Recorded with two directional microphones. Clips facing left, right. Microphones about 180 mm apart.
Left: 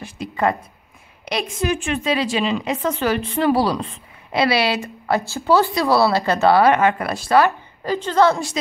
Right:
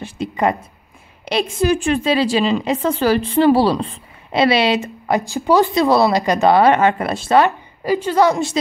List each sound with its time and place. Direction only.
0.0 s a woman's voice: 20° right (ahead or behind)
7.8 s a woman's voice: 10° right (ahead or behind)